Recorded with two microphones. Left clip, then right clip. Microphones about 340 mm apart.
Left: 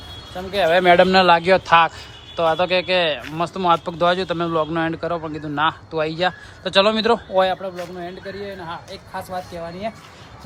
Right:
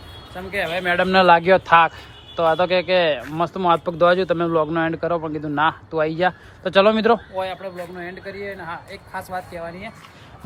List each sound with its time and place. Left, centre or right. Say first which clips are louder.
0.3 s speech: left 7 dB; centre
1.0 s speech: even; centre
7.3 s a man's voice: left 8 dB; left
7.6 s speech: left 2 dB; centre